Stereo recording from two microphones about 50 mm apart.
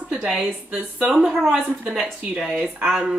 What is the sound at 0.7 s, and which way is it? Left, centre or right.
Speech, centre.